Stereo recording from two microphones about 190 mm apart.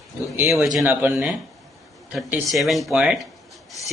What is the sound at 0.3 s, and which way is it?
Speech, centre (ahead or behind).